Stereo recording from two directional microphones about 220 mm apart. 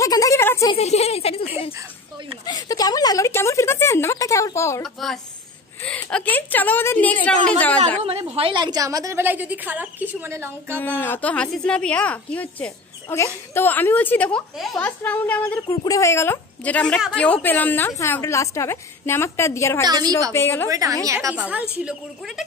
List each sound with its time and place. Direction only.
0.0 s a sound: 15° left (ahead or behind)
0.7 s speech: 30° left (ahead or behind)
4.8 s speech: centre (ahead or behind)
8.0 s a woman's voice: 25° right (ahead or behind); by 10.8 s 10° right (ahead or behind)
10.8 s speech: 10° left (ahead or behind)
19.8 s a woman's voice: 20° right (ahead or behind)
20.3 s speech: 10° left (ahead or behind)
20.7 s a woman's voice: 15° right (ahead or behind)